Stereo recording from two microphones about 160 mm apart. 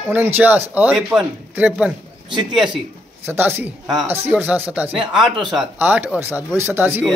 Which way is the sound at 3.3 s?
15° right (ahead or behind).